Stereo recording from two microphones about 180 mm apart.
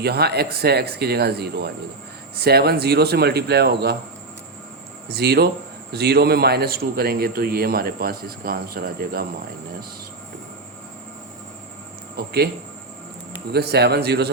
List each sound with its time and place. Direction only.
0.0 s a man's voice: 60° right (ahead or behind)
5.0 s a man's voice: 65° right (ahead or behind)
12.1 s speech: 60° right (ahead or behind)
13.5 s a man's voice: 65° right (ahead or behind)